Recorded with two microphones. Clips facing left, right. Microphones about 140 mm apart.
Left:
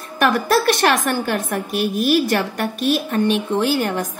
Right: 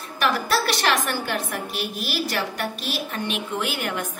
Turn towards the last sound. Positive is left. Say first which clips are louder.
# left 8 dB
turn(degrees=35)  # may be behind; listen again after turning